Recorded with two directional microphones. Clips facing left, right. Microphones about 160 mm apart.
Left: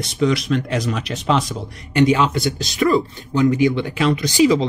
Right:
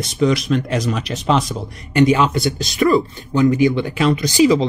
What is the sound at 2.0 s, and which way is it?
Speech, 5° right (ahead or behind).